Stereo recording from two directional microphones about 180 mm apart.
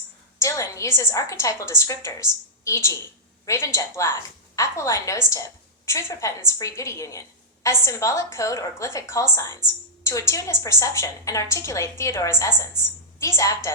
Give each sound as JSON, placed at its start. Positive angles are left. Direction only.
{"t": 0.3, "sound": "a woman's voice", "side_deg": 15}